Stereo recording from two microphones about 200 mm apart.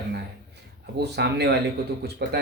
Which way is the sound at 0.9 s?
55° right (ahead or behind).